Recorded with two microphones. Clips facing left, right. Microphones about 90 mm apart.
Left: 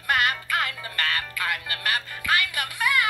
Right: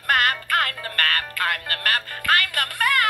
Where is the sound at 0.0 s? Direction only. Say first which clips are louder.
Right 3 dB; 50° right (ahead or behind).